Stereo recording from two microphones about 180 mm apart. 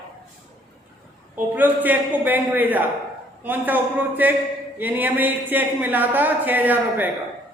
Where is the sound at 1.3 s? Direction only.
10° right (ahead or behind).